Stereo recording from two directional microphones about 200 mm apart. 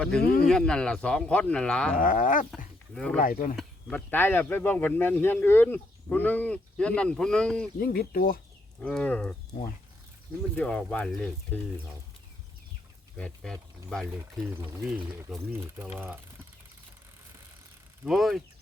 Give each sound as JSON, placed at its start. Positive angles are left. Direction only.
{"t": 0.2, "sound": "speech", "side_deg": 50}
{"t": 0.4, "sound": "speech", "side_deg": 5}
{"t": 2.0, "sound": "wild animals", "side_deg": 40}
{"t": 2.9, "sound": "speech", "side_deg": 5}
{"t": 3.2, "sound": "speech", "side_deg": 45}
{"t": 3.6, "sound": "speech", "side_deg": 5}
{"t": 7.8, "sound": "speech", "side_deg": 50}
{"t": 8.8, "sound": "speech", "side_deg": 5}
{"t": 10.5, "sound": "speech", "side_deg": 5}
{"t": 13.1, "sound": "speech", "side_deg": 5}
{"t": 18.0, "sound": "speech", "side_deg": 0}